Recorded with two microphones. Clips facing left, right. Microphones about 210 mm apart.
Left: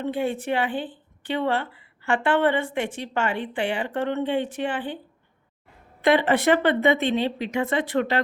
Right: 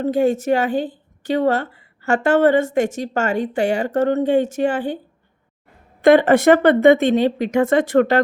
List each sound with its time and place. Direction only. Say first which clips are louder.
0.0 s speech: right 8 dB; 40° right (ahead or behind)
6.0 s speech: right 8 dB; 45° right (ahead or behind)